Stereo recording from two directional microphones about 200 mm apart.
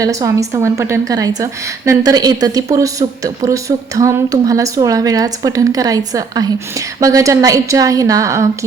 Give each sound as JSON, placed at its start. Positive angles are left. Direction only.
{"t": 0.0, "sound": "a woman's voice", "side_deg": -15}